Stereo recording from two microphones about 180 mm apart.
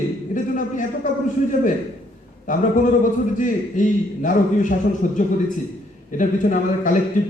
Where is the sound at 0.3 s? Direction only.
45° left (ahead or behind).